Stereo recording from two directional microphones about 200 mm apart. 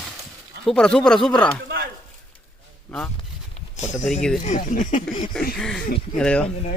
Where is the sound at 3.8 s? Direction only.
35° left (ahead or behind).